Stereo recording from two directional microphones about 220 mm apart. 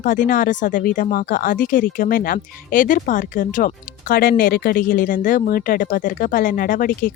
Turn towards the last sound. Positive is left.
turn(degrees=40)  # may be behind; listen again after turning